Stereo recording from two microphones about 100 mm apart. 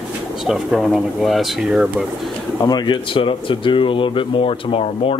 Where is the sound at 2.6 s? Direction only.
50° left (ahead or behind).